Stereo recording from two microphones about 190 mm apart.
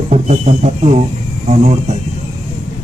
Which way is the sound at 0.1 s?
35° right (ahead or behind).